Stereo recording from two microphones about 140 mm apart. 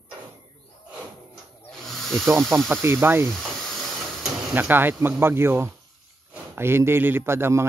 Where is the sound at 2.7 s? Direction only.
20° right (ahead or behind).